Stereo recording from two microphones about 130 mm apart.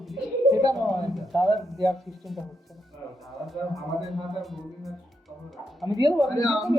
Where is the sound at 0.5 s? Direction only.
25° right (ahead or behind).